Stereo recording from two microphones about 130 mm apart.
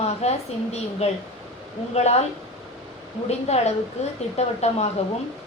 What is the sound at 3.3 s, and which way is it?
A woman's voice, 55° left (ahead or behind).